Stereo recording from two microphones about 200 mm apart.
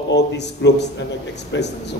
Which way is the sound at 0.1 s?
60° left (ahead or behind).